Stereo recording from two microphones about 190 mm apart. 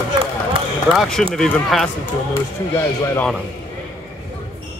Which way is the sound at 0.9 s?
Centre (ahead or behind).